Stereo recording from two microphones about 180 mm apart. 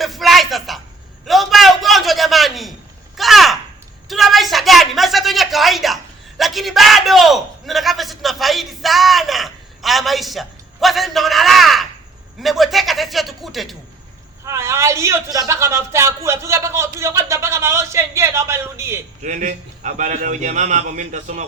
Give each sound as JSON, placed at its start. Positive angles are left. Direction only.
{"t": 0.0, "sound": "a sound", "side_deg": 0}
{"t": 12.4, "sound": "speech", "side_deg": 0}
{"t": 14.4, "sound": "a man's voice", "side_deg": -15}
{"t": 19.2, "sound": "a man's voice", "side_deg": -45}